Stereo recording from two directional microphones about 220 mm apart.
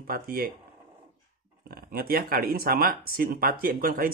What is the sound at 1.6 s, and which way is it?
Speech, 45° right (ahead or behind).